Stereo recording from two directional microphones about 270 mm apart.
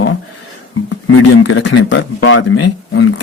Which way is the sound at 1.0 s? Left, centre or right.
Left.